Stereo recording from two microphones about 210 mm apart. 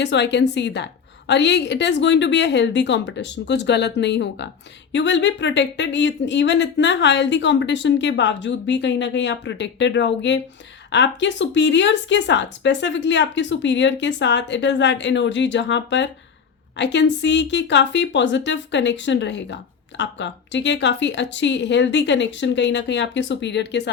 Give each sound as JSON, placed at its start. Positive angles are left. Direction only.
{"t": 0.0, "sound": "speech", "side_deg": 55}